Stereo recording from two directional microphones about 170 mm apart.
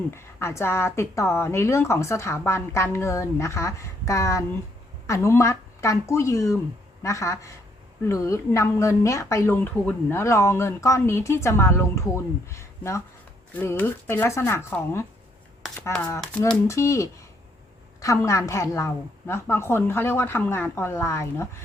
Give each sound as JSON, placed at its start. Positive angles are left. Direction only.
{"t": 0.1, "sound": "speech", "side_deg": 15}